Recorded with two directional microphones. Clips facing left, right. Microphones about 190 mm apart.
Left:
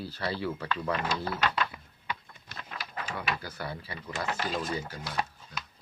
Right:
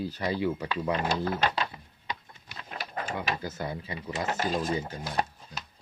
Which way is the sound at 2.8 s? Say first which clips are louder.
Right 4 dB; 50° right (ahead or behind).